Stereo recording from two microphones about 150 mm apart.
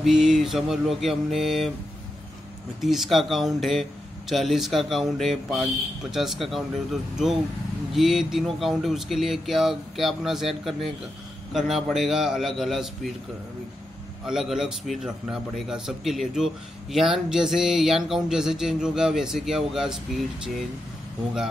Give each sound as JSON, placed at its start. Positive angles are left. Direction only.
{"t": 0.0, "sound": "a man's voice", "side_deg": 0}
{"t": 2.8, "sound": "a man's voice", "side_deg": 0}
{"t": 14.2, "sound": "a man's voice", "side_deg": -5}